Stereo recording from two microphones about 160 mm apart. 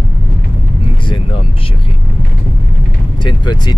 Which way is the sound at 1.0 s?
30° left (ahead or behind).